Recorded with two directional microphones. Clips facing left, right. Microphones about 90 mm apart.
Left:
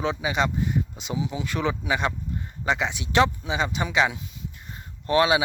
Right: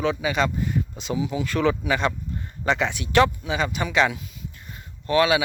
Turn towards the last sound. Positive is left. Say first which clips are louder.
# right 1 dB
turn(degrees=25)  # may be behind; listen again after turning